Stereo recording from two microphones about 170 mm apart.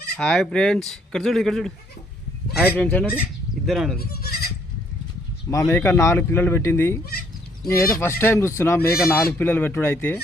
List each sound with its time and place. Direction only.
0.2 s speech: 5° left (ahead or behind)
2.7 s speech: 10° left (ahead or behind)
3.9 s speech: 65° left (ahead or behind)
5.5 s speech: 20° left (ahead or behind)
7.0 s speech: 60° left (ahead or behind)
7.9 s speech: 15° left (ahead or behind)